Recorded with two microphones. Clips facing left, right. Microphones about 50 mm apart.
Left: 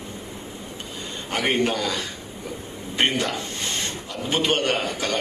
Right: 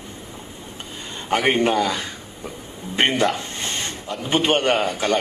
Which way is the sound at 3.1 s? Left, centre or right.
Right.